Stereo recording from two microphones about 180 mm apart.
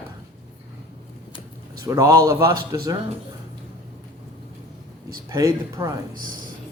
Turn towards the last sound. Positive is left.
turn(degrees=-20)  # may be behind; listen again after turning